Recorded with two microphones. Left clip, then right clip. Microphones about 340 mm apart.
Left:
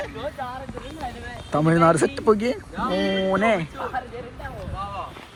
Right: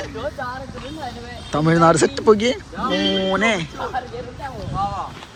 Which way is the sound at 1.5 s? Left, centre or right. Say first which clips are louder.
Right 3 dB; centre.